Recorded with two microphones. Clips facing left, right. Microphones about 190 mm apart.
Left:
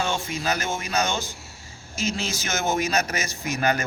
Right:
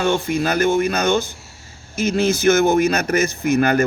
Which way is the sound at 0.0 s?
55° right (ahead or behind).